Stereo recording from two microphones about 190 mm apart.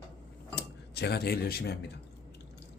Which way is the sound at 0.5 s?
60° left (ahead or behind).